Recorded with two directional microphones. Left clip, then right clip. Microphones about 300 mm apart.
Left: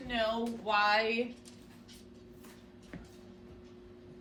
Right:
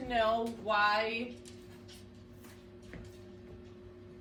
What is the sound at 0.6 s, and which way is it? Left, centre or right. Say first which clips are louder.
Speech: left 1 dB; centre.